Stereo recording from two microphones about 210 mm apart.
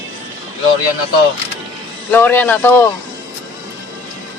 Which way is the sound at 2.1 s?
10° left (ahead or behind).